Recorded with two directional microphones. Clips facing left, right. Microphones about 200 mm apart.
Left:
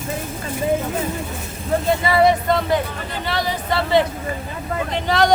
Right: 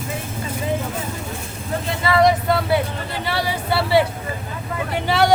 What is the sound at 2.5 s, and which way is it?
Speech, 10° right (ahead or behind).